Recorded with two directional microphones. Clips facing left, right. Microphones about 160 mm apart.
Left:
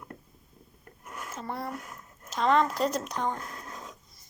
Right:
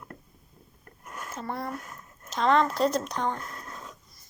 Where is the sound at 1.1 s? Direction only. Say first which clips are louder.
Right 2 dB; 10° left (ahead or behind).